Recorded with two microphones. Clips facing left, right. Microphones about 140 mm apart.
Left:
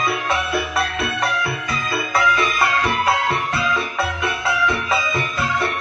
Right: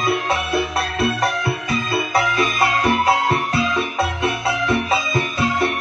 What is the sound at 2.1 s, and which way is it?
Music, 30° right (ahead or behind).